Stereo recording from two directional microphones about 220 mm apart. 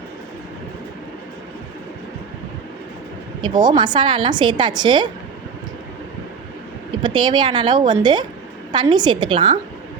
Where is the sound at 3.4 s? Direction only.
20° right (ahead or behind).